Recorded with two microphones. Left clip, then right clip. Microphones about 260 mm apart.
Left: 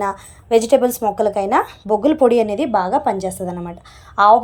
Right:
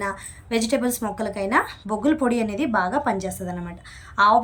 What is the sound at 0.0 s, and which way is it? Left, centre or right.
A woman's voice, centre.